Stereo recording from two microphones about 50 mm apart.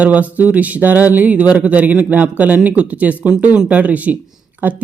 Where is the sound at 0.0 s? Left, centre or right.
Right.